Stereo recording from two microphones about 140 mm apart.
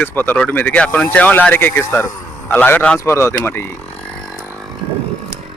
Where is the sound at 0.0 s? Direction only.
15° left (ahead or behind).